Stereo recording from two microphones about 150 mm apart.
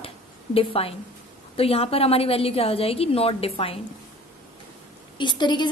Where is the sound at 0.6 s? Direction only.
40° left (ahead or behind).